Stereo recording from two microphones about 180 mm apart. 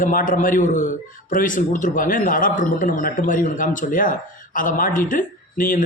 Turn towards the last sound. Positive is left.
turn(degrees=50)  # may be behind; listen again after turning